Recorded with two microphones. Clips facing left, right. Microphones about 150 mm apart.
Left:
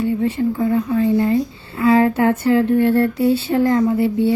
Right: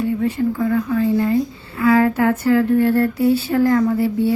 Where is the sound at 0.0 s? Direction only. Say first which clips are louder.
Left 1 dB; 25° left (ahead or behind).